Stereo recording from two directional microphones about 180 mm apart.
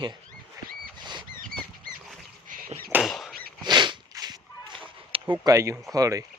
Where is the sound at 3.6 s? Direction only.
25° right (ahead or behind).